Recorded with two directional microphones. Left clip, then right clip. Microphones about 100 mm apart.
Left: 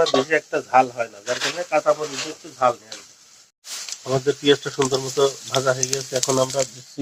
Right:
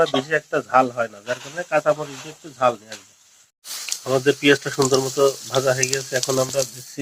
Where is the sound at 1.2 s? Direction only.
30° left (ahead or behind).